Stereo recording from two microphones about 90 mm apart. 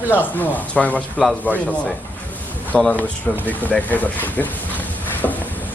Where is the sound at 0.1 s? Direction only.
20° left (ahead or behind).